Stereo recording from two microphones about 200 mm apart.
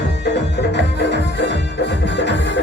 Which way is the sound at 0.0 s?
55° left (ahead or behind).